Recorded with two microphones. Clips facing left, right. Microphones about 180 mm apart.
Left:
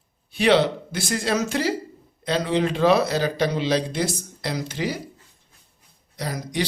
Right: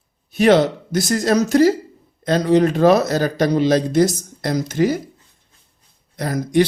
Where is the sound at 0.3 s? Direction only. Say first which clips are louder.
Right 5 dB; 45° right (ahead or behind).